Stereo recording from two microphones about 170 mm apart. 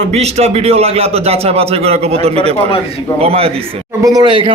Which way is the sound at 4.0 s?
20° right (ahead or behind).